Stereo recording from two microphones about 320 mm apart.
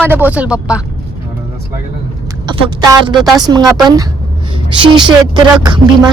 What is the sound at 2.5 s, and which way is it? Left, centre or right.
Speech, centre.